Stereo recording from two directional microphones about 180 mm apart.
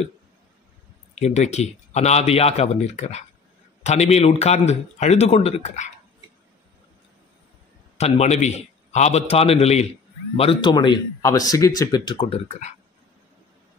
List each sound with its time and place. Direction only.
1.2 s a man's voice: 40° left (ahead or behind)
8.0 s a man's voice: 40° left (ahead or behind)